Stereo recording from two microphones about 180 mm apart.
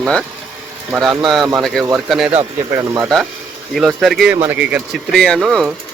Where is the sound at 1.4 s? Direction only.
25° right (ahead or behind).